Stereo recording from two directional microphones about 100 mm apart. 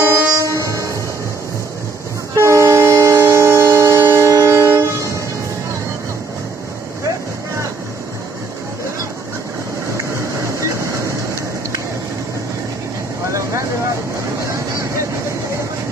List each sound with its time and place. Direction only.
0.0 s train: 25° right (ahead or behind)
2.3 s train: 30° right (ahead or behind)
9.9 s vehicle: 30° right (ahead or behind)